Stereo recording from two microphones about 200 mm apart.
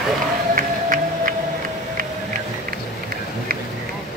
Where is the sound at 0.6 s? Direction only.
40° right (ahead or behind).